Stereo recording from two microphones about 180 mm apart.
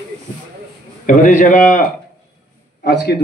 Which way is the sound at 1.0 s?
45° left (ahead or behind).